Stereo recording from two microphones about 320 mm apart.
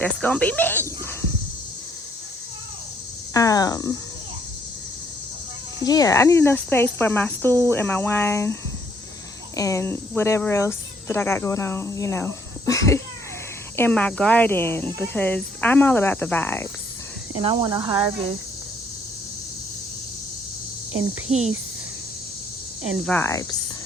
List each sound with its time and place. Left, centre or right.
0.0 s speech: centre
3.3 s speech: centre
5.8 s speech: centre
9.6 s speech: centre
17.4 s speech: centre
21.3 s speech: centre
23.0 s speech: centre